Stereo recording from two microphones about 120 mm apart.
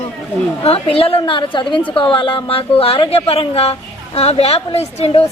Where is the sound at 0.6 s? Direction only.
55° left (ahead or behind).